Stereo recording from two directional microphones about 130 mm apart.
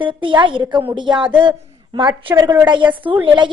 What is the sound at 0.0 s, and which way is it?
A woman's voice, 40° right (ahead or behind).